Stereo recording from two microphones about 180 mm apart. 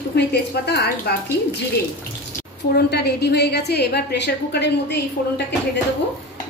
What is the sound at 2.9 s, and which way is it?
A woman's voice, 65° left (ahead or behind).